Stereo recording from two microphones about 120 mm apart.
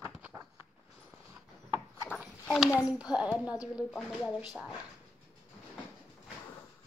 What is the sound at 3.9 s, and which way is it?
Speech, 5° left (ahead or behind).